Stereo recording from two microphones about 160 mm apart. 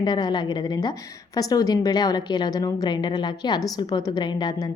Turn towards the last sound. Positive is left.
turn(degrees=30)  # may be behind; listen again after turning